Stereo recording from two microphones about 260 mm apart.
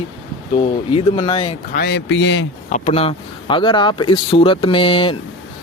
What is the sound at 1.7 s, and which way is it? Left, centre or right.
Speech, left.